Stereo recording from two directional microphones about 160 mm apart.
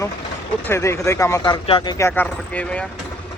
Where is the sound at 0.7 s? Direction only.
15° left (ahead or behind).